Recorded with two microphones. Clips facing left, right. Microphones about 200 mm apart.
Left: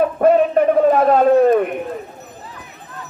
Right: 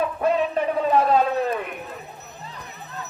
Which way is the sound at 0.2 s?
50° left (ahead or behind).